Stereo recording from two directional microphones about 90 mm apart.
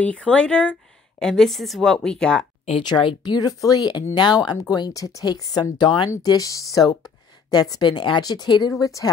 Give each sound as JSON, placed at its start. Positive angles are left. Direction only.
{"t": 0.0, "sound": "speech", "side_deg": 10}
{"t": 2.8, "sound": "speech", "side_deg": 60}
{"t": 3.3, "sound": "speech", "side_deg": 45}
{"t": 6.2, "sound": "speech", "side_deg": 40}